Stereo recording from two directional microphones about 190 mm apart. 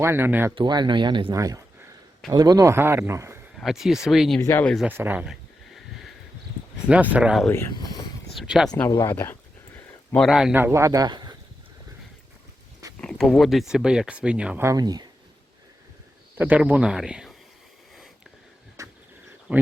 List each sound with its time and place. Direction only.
0.0 s speech: 10° right (ahead or behind)
0.5 s speech: 25° right (ahead or behind)
3.5 s speech: centre (ahead or behind)
4.4 s speech: 15° left (ahead or behind)
4.9 s speech: 10° right (ahead or behind)
6.8 s speech: 5° right (ahead or behind)
7.5 s speech: 15° left (ahead or behind)
8.4 s speech: centre (ahead or behind)
8.9 s a sound: 15° left (ahead or behind)
10.2 s speech: 5° right (ahead or behind); by 11.3 s 20° right (ahead or behind)
13.0 s speech: 5° left (ahead or behind); by 15.1 s 20° right (ahead or behind)
16.4 s speech: 10° right (ahead or behind)
18.8 s a sound: 15° right (ahead or behind)
19.5 s speech: 5° right (ahead or behind)